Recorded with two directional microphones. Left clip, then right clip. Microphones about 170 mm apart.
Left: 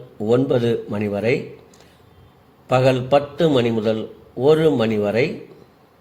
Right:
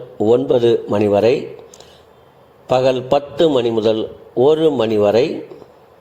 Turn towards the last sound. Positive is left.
turn(degrees=-15)  # may be behind; listen again after turning